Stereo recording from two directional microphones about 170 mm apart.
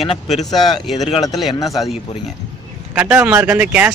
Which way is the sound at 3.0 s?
5° right (ahead or behind).